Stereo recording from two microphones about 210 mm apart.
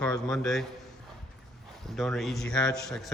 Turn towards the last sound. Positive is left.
turn(degrees=0)  # may be behind; listen again after turning